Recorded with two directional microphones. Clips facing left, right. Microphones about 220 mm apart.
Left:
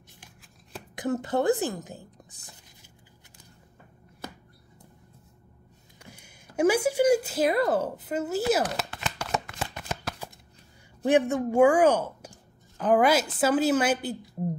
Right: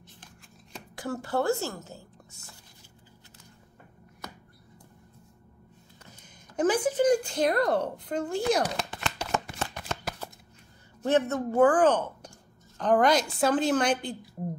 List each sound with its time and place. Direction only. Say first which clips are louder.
0.9 s a woman's voice: left 3 dB; 20° left (ahead or behind)
6.0 s a sound: left 5 dB; 10° left (ahead or behind)
9.6 s shuffling cards: even; 10° left (ahead or behind)
11.1 s speech: left 3 dB; 15° left (ahead or behind)